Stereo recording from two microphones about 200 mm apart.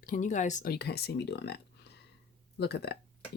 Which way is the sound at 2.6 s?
55° left (ahead or behind).